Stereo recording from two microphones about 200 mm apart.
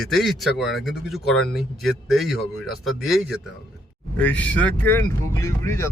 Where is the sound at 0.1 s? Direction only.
Centre (ahead or behind).